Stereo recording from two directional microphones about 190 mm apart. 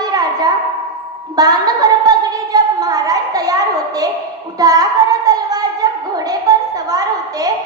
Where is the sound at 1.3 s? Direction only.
20° right (ahead or behind).